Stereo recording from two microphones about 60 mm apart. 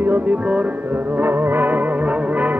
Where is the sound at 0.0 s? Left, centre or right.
Right.